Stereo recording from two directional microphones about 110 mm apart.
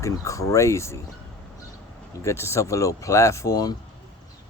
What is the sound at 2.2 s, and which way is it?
Speech, 25° left (ahead or behind).